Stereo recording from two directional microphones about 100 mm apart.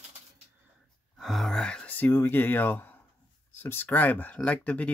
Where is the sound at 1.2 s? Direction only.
Centre (ahead or behind).